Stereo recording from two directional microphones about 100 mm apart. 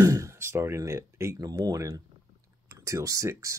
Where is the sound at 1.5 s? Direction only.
40° right (ahead or behind).